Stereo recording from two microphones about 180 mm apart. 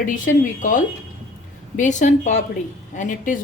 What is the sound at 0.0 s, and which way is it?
Speech, 45° left (ahead or behind).